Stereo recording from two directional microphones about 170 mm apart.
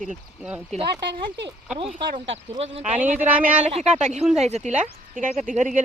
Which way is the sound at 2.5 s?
35° right (ahead or behind).